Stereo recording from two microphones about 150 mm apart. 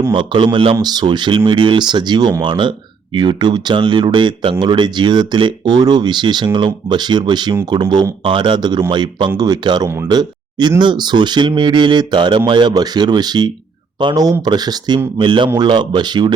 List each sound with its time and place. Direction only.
0.1 s speech: 30° right (ahead or behind)